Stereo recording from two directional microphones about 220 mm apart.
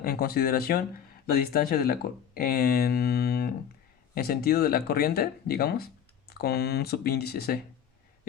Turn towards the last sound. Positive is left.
turn(degrees=45)  # may be behind; listen again after turning